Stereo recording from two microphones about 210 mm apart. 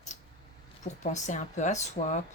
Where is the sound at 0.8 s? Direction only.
35° left (ahead or behind).